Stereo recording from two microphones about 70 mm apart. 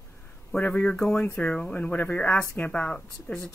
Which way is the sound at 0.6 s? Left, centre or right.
Centre.